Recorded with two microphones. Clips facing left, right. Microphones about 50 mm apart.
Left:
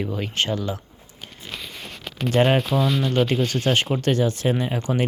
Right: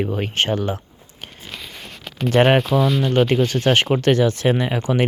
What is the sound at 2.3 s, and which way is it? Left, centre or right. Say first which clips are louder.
Speech: right 4 dB; right.